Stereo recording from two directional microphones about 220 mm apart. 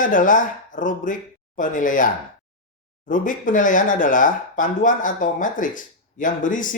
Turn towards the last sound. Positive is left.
turn(degrees=35)  # may be behind; listen again after turning